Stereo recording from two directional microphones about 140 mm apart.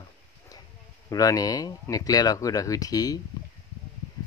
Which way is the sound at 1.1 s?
25° left (ahead or behind).